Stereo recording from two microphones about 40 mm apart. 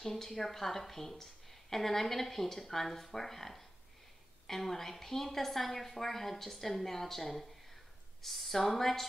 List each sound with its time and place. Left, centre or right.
0.0 s a woman's voice: centre